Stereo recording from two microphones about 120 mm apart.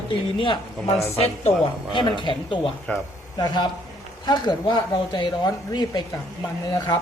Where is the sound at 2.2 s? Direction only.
45° left (ahead or behind).